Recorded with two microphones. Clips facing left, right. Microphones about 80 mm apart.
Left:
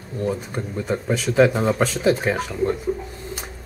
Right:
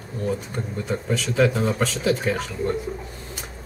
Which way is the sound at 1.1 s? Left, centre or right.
Left.